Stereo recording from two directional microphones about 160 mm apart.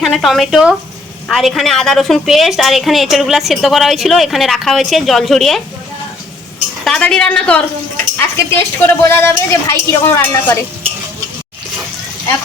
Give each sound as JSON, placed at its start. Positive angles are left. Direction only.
{"t": 0.0, "sound": "a woman's voice", "side_deg": 0}
{"t": 6.8, "sound": "a woman's voice", "side_deg": 5}